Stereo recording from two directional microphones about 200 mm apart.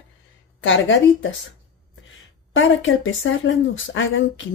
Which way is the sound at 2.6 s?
75° left (ahead or behind).